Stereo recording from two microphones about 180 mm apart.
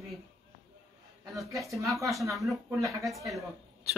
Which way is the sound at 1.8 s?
Centre (ahead or behind).